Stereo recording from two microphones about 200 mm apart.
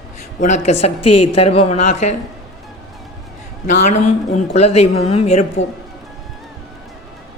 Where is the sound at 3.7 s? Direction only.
35° left (ahead or behind).